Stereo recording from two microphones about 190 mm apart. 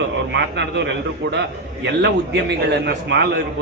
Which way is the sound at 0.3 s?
70° right (ahead or behind).